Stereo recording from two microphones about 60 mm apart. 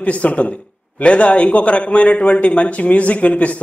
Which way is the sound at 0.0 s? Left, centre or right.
Left.